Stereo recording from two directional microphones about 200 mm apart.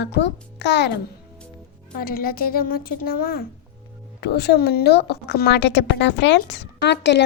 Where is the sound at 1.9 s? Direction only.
45° left (ahead or behind).